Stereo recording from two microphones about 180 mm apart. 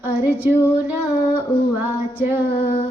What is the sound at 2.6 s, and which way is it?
Humming, 30° left (ahead or behind).